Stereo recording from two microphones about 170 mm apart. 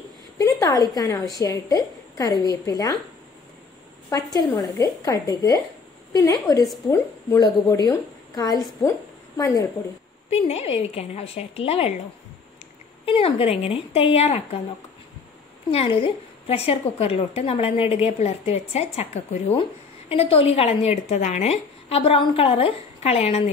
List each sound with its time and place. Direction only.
0.4 s a woman's voice: 20° left (ahead or behind)
4.1 s a woman's voice: 20° left (ahead or behind)
10.3 s speech: 40° left (ahead or behind)
13.0 s speech: 35° left (ahead or behind)
15.7 s speech: 35° left (ahead or behind)
20.1 s speech: 35° left (ahead or behind)